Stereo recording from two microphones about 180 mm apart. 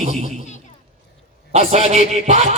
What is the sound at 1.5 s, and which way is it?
A man's voice, 35° right (ahead or behind).